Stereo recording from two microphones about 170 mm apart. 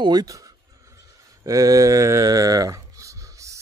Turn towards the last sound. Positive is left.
turn(degrees=-20)  # may be behind; listen again after turning